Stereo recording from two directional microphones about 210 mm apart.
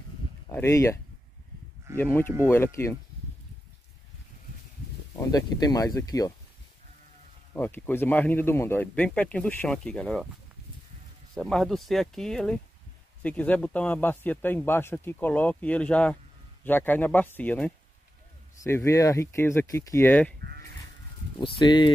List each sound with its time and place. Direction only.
0.5 s a man's voice: 15° left (ahead or behind)
5.1 s a man's voice: 20° left (ahead or behind)
7.5 s a man's voice: 10° left (ahead or behind)
11.3 s a man's voice: centre (ahead or behind)
21.4 s speech: 20° left (ahead or behind)